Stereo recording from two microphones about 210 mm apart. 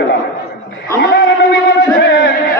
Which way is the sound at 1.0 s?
50° left (ahead or behind).